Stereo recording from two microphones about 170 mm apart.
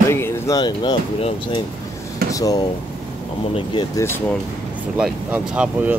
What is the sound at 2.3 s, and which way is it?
Speech, 20° left (ahead or behind).